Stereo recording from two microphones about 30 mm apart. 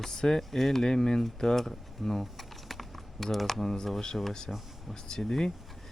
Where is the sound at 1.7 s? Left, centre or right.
Centre.